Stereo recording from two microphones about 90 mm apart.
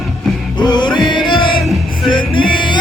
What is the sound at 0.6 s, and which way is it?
Music, 55° left (ahead or behind).